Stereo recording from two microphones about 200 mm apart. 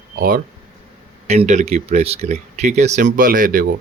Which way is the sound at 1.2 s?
35° right (ahead or behind).